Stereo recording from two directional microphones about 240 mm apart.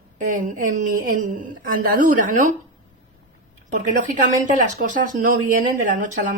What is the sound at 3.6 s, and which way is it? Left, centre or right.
Speech, right.